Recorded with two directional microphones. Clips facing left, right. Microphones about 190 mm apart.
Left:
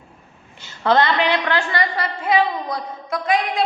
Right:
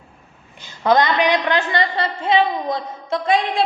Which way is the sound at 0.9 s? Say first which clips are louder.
Right 1 dB; 15° right (ahead or behind).